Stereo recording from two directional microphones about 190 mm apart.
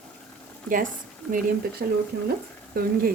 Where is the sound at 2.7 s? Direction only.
50° right (ahead or behind).